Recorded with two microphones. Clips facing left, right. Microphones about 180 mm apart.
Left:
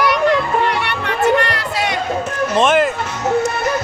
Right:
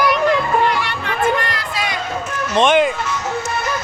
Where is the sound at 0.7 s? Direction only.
65° left (ahead or behind).